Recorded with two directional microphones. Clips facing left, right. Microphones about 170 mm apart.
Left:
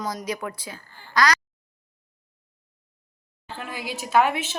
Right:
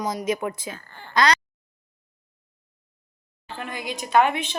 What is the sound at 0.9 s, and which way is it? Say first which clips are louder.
Speech: right 5 dB; 60° right (ahead or behind).